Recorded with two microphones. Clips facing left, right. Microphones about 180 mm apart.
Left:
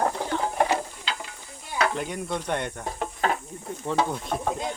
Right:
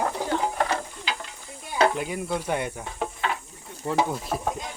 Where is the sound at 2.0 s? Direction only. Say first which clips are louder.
Right 1 dB; 5° right (ahead or behind).